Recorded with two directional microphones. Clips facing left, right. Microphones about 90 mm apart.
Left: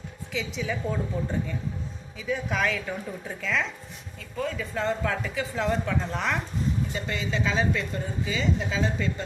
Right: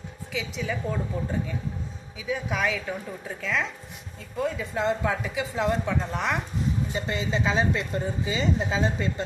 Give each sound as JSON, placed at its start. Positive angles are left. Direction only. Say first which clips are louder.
{"t": 0.3, "sound": "a woman's voice", "louder": "even", "side_deg": 0}
{"t": 4.4, "sound": "a woman's voice", "louder": "right 2 dB", "side_deg": -15}
{"t": 6.9, "sound": "speech", "louder": "right 2 dB", "side_deg": -25}